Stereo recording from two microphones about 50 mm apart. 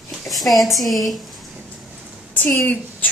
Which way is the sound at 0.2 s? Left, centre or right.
Centre.